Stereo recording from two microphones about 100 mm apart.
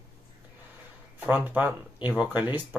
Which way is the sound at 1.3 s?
15° right (ahead or behind).